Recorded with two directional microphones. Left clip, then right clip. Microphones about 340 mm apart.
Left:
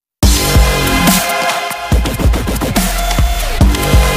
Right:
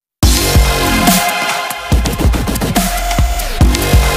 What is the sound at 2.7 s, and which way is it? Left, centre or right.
Music, centre.